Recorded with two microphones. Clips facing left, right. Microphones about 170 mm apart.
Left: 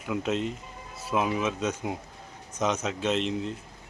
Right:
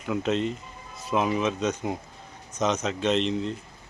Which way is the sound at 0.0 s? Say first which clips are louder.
Right 3 dB; 5° left (ahead or behind).